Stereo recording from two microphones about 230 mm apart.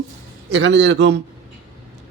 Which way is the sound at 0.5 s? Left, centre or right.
Right.